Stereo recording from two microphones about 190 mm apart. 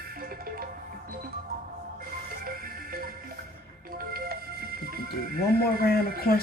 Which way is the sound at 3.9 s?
50° right (ahead or behind).